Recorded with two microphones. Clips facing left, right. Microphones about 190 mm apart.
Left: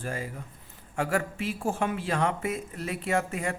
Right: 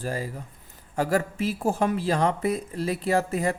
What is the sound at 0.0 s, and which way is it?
Speech, 35° right (ahead or behind).